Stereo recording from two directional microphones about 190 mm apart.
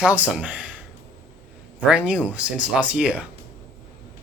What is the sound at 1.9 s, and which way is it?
Speech, 5° right (ahead or behind).